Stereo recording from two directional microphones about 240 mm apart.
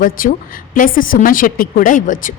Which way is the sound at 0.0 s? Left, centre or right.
Left.